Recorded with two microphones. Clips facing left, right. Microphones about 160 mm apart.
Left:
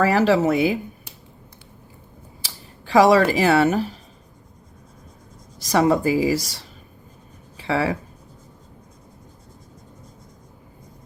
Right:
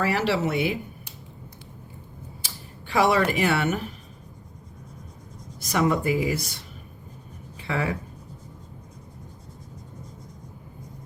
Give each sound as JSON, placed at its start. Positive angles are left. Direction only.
{"t": 0.0, "sound": "a woman's voice", "side_deg": 40}
{"t": 2.8, "sound": "a woman's voice", "side_deg": 40}
{"t": 5.6, "sound": "a woman's voice", "side_deg": 35}
{"t": 7.7, "sound": "a woman's voice", "side_deg": 35}